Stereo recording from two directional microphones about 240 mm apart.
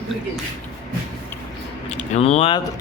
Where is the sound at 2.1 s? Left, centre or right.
Left.